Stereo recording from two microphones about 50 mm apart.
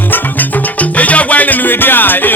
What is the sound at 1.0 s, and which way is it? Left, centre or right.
Music, left.